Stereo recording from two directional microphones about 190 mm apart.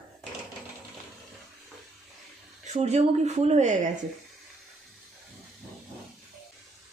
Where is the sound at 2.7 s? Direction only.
35° right (ahead or behind).